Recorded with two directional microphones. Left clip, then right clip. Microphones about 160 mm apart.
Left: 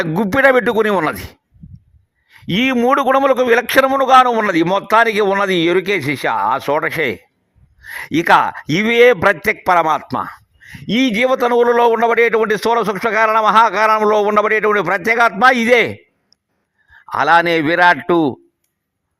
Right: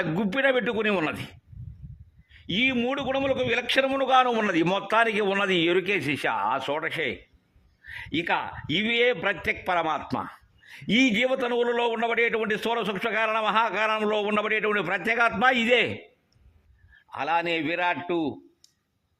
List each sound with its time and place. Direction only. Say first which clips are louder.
0.0 s speech: left 12 dB; 35° left (ahead or behind)
2.3 s a man's voice: left 8 dB; 45° left (ahead or behind)
17.1 s a man's voice: left 14 dB; 45° left (ahead or behind)